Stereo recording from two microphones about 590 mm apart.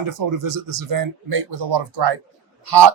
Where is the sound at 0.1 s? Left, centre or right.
Right.